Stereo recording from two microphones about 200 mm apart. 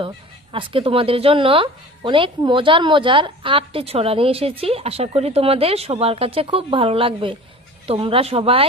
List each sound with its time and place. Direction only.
0.5 s speech: 25° right (ahead or behind)